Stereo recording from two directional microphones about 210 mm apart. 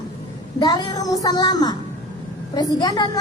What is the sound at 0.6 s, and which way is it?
A child's voice, 20° left (ahead or behind).